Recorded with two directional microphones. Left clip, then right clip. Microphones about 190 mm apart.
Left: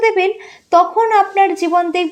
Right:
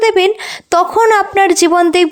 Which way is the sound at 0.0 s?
30° right (ahead or behind).